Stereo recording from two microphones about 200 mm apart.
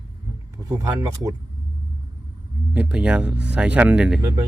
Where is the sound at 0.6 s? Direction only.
15° right (ahead or behind).